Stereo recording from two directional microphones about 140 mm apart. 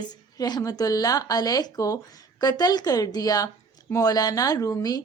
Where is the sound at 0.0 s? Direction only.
30° left (ahead or behind).